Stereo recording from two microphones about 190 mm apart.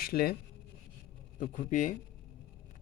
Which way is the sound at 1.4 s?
45° left (ahead or behind).